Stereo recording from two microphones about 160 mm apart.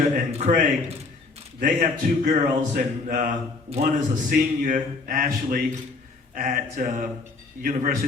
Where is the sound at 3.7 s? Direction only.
40° right (ahead or behind).